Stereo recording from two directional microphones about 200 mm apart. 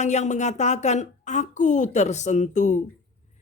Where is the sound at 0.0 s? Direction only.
35° left (ahead or behind).